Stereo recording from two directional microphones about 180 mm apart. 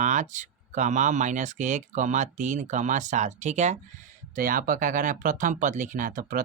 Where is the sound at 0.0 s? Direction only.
45° right (ahead or behind).